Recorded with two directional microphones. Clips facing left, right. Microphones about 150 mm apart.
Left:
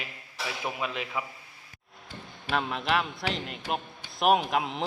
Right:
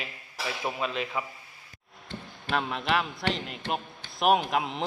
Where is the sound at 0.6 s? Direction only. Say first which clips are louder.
Right 2 dB; 20° right (ahead or behind).